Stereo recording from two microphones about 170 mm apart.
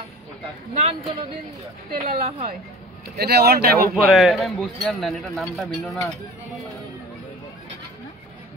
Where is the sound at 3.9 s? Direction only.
Centre (ahead or behind).